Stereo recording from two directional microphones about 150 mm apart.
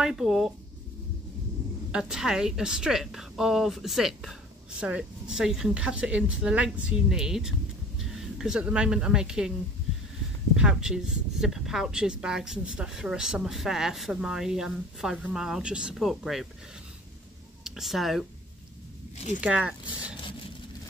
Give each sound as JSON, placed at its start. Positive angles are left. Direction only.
{"t": 0.0, "sound": "a woman's voice", "side_deg": -5}
{"t": 1.9, "sound": "a woman's voice", "side_deg": -5}
{"t": 10.5, "sound": "a woman's voice", "side_deg": -5}
{"t": 17.6, "sound": "speech", "side_deg": 0}
{"t": 19.1, "sound": "speech", "side_deg": 50}
{"t": 19.4, "sound": "speech", "side_deg": -5}